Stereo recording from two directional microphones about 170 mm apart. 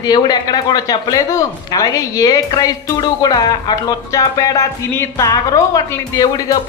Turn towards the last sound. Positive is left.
turn(degrees=25)  # may be behind; listen again after turning